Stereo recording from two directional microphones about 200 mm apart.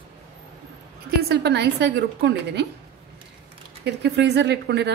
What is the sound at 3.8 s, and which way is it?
A woman's voice, 60° right (ahead or behind).